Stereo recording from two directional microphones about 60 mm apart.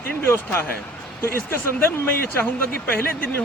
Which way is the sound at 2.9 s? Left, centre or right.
Left.